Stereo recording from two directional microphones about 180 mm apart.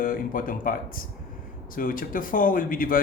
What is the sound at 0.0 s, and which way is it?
A man's voice, 50° left (ahead or behind).